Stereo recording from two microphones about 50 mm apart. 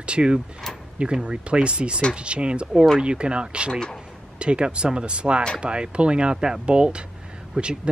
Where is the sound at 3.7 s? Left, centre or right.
Centre.